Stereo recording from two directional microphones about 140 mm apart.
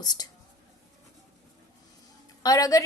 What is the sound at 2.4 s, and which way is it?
Speech, 25° left (ahead or behind).